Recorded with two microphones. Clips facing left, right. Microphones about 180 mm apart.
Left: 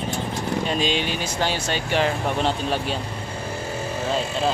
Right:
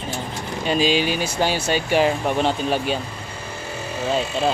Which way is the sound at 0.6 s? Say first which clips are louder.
Right 8 dB; 5° right (ahead or behind).